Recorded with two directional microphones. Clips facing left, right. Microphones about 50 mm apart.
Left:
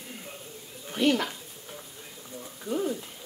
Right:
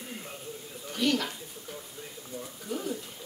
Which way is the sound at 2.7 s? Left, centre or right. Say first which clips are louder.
Left 5 dB; left.